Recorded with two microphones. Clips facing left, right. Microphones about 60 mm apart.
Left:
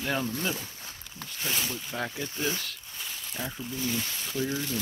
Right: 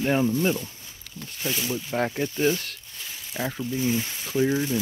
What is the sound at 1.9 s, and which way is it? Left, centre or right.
Speech, right.